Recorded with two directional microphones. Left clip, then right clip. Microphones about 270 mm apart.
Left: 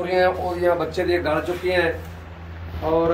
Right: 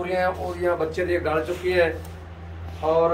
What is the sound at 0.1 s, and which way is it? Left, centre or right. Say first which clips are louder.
Speech: left 5 dB; left.